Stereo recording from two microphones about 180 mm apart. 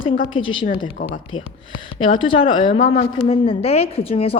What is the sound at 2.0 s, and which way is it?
A woman's voice, 30° left (ahead or behind).